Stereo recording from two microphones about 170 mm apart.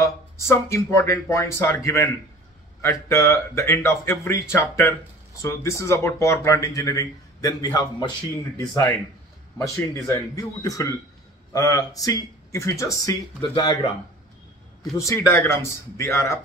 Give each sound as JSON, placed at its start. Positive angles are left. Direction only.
{"t": 0.0, "sound": "speech", "side_deg": 15}
{"t": 10.0, "sound": "speech", "side_deg": 20}
{"t": 15.0, "sound": "speech", "side_deg": 15}